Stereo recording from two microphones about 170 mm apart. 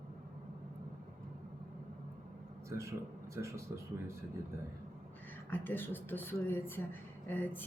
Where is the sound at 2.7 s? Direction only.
15° right (ahead or behind).